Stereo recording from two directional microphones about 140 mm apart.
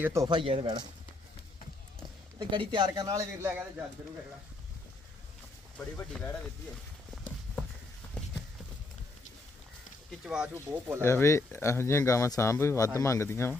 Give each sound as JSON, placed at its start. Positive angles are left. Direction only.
{"t": 0.0, "sound": "a man's voice", "side_deg": -20}
{"t": 0.3, "sound": "speech", "side_deg": -35}
{"t": 2.5, "sound": "a man's voice", "side_deg": -35}
{"t": 5.7, "sound": "speech", "side_deg": 10}
{"t": 10.1, "sound": "speech", "side_deg": -5}
{"t": 10.7, "sound": "speech", "side_deg": -15}
{"t": 11.0, "sound": "speech", "side_deg": 20}